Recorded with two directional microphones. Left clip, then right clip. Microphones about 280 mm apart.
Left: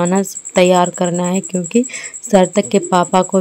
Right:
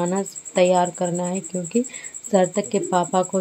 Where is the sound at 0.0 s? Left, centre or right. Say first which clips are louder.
Left 7 dB; left.